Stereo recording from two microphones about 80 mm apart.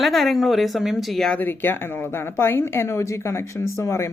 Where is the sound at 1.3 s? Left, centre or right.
Left.